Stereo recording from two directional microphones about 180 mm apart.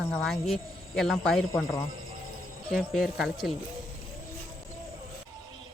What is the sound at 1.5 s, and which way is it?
Speech, 20° left (ahead or behind).